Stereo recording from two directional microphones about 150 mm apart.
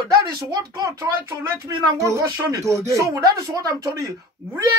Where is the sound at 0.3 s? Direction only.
25° right (ahead or behind).